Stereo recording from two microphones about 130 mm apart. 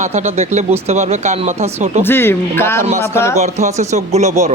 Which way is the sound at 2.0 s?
15° left (ahead or behind).